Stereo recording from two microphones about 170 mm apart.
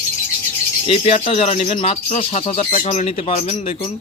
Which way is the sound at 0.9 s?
35° left (ahead or behind).